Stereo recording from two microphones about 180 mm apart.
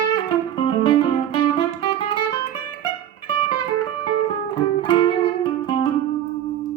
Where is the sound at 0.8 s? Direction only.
25° left (ahead or behind).